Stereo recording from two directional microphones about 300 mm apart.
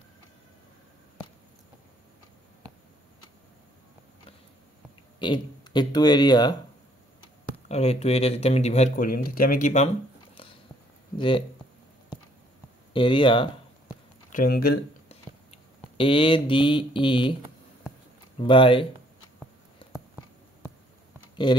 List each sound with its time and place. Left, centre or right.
5.2 s speech: centre
7.5 s speech: left
11.1 s speech: centre
12.9 s a sound: centre
14.4 s speech: left
15.5 s speech: centre
18.4 s speech: centre
19.8 s a sound: centre
21.5 s speech: centre